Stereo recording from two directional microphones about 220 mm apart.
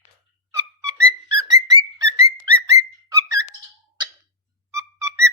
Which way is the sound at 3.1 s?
15° right (ahead or behind).